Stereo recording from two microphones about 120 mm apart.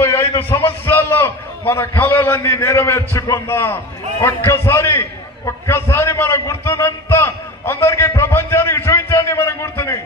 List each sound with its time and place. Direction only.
0.2 s a man's voice: 20° left (ahead or behind)